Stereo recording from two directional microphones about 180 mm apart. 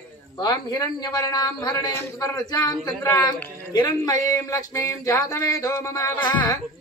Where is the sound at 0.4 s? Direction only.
20° left (ahead or behind).